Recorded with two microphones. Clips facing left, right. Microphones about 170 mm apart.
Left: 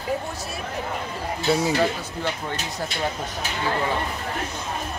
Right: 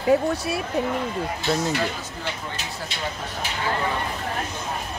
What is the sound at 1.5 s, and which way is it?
Speech, 10° left (ahead or behind).